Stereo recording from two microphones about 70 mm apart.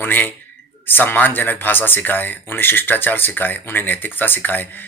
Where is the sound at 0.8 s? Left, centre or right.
Left.